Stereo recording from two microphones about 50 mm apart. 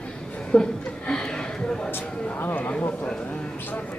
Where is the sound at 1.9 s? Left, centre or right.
Left.